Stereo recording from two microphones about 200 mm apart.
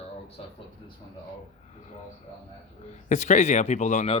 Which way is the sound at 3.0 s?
35° left (ahead or behind).